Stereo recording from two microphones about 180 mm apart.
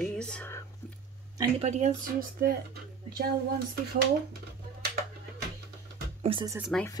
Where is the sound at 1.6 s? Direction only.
40° right (ahead or behind).